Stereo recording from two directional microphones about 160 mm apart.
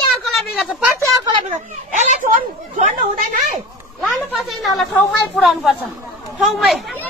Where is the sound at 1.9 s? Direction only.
50° right (ahead or behind).